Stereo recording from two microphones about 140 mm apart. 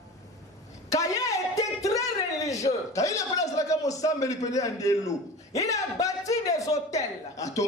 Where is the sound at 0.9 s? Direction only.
25° left (ahead or behind).